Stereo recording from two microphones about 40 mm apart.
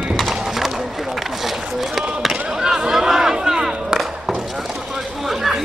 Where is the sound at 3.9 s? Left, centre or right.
Centre.